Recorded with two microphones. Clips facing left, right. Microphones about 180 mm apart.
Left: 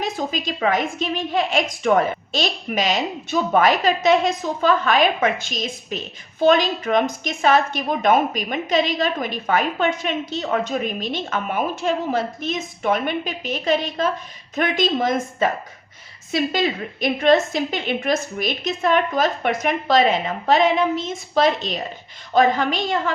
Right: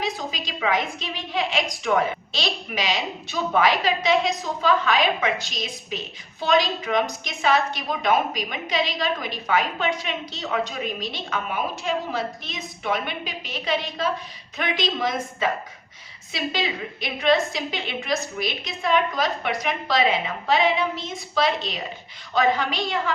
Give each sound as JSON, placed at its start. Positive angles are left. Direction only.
{"t": 0.0, "sound": "a woman's voice", "side_deg": 50}